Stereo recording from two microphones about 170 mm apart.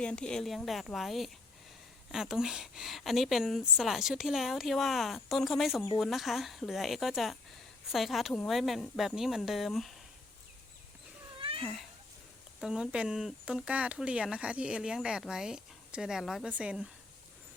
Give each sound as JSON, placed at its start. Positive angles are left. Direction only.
{"t": 0.0, "sound": "speech", "side_deg": 5}
{"t": 11.3, "sound": "cat", "side_deg": -30}
{"t": 11.6, "sound": "speech", "side_deg": 0}